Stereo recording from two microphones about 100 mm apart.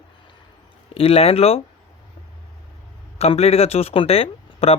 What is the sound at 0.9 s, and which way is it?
Speech, 75° left (ahead or behind).